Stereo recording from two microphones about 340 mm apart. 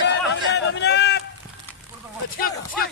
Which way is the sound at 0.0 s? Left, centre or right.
Left.